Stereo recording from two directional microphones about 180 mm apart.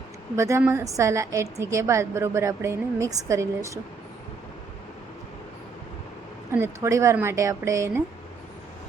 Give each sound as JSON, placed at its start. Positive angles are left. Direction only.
{"t": 0.3, "sound": "a woman's voice", "side_deg": -15}
{"t": 6.5, "sound": "a woman's voice", "side_deg": -15}